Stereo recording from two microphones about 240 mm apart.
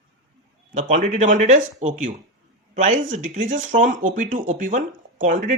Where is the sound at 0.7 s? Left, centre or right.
Right.